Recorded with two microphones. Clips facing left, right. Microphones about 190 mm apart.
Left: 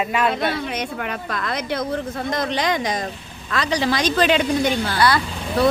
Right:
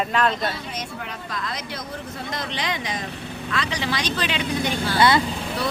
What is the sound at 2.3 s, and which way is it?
Speech, 45° left (ahead or behind).